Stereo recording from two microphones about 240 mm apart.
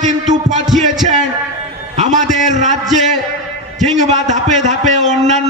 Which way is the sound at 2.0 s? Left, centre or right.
Right.